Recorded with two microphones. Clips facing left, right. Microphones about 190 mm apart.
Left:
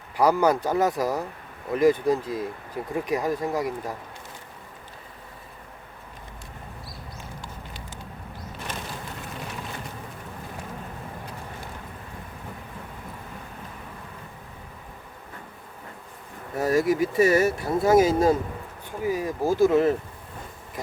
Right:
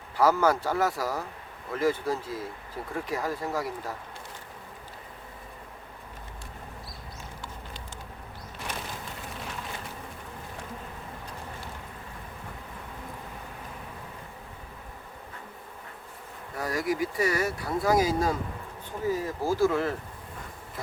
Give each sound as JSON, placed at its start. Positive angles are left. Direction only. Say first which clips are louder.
{"t": 0.2, "sound": "speech", "louder": "left 3 dB", "side_deg": 15}
{"t": 16.6, "sound": "speech", "louder": "left 7 dB", "side_deg": 25}